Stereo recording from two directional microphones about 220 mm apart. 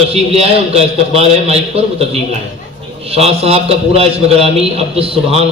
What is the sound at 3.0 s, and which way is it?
A man's voice, 25° right (ahead or behind).